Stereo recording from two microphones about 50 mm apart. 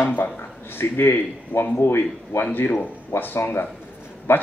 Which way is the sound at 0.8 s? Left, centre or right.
Left.